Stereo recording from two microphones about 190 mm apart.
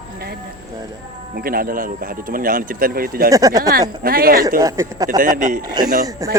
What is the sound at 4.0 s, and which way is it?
Speech, 50° right (ahead or behind).